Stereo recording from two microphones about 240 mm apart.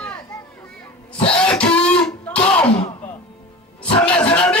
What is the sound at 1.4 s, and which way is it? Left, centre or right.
Music, centre.